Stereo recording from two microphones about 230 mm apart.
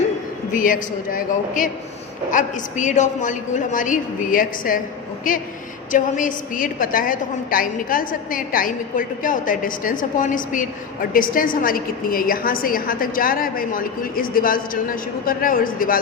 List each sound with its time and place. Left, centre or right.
0.5 s a woman's voice: left